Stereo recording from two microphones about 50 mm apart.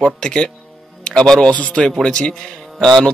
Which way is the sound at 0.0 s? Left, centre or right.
Centre.